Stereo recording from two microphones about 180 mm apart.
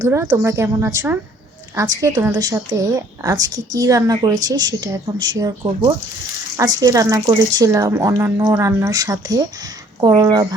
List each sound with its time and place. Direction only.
0.0 s a woman's voice: 20° right (ahead or behind)
6.6 s speech: 20° right (ahead or behind)